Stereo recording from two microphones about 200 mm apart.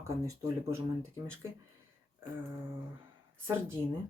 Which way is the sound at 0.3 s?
15° right (ahead or behind).